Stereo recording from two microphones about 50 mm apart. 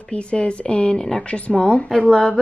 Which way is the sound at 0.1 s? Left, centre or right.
Left.